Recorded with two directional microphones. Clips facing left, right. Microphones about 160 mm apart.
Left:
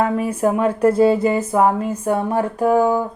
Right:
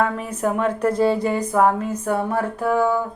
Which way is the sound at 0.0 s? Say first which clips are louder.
Left 4 dB; 10° left (ahead or behind).